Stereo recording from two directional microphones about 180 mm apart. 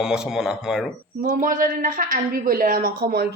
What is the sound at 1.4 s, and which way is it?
A woman's voice, 50° right (ahead or behind).